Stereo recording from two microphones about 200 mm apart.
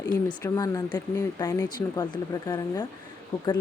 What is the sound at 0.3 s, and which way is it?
A woman's voice, 20° left (ahead or behind).